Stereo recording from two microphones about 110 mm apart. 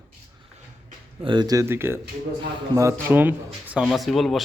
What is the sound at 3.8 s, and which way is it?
Speech, centre (ahead or behind).